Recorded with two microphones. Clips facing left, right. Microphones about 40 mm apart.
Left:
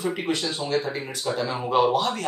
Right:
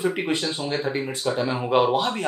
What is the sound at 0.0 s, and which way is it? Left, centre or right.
Speech, right.